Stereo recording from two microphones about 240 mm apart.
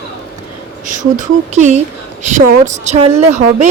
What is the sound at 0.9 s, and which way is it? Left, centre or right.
Speech, right.